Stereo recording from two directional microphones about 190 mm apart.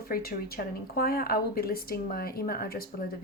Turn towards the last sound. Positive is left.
turn(degrees=50)  # may be behind; listen again after turning